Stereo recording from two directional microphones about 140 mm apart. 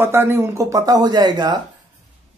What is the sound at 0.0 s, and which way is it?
Speech, 15° right (ahead or behind).